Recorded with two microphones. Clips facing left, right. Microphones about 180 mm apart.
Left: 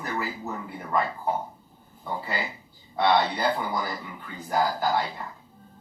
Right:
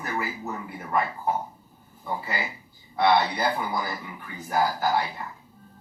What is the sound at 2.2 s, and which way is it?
Speech, 20° left (ahead or behind).